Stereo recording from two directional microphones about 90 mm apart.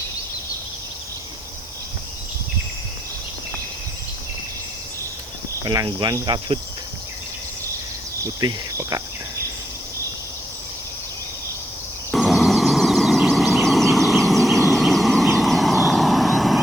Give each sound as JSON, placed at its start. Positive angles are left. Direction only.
{"t": 5.6, "sound": "cricket", "side_deg": -45}
{"t": 8.2, "sound": "cricket", "side_deg": -40}
{"t": 12.1, "sound": "vehicle", "side_deg": 0}